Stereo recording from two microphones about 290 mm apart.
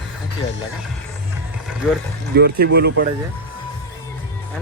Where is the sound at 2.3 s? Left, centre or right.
Right.